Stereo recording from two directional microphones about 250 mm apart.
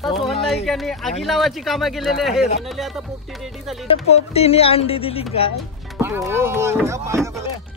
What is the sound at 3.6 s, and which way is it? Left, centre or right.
Speech, centre.